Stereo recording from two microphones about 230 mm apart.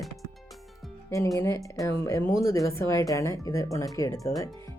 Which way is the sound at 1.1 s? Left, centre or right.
Centre.